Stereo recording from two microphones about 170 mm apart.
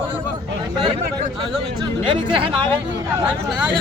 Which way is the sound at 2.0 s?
30° right (ahead or behind).